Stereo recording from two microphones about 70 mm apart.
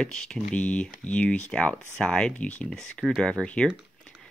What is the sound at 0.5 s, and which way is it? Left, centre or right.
Speech, centre.